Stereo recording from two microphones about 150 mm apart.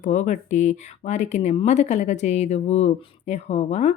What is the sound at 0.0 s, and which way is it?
Speech, 55° left (ahead or behind).